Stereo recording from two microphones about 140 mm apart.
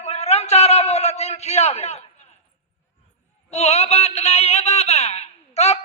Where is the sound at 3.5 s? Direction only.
50° left (ahead or behind).